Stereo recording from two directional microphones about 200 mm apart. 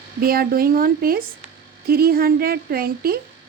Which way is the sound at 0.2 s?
50° right (ahead or behind).